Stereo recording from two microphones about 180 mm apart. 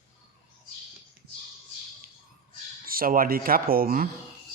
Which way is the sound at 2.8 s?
55° right (ahead or behind).